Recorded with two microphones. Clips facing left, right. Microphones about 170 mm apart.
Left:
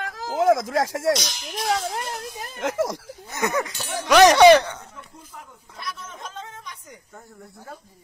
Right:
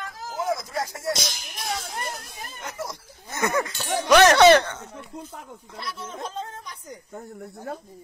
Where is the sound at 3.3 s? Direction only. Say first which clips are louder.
Even; 15° left (ahead or behind).